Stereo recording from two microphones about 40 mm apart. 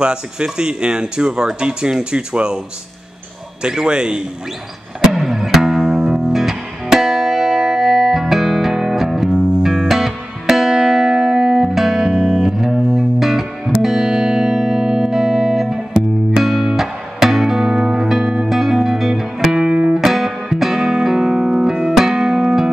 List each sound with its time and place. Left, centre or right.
0.0 s speech: right
3.6 s speech: centre
5.1 s music: centre
12.0 s music: centre
20.0 s music: centre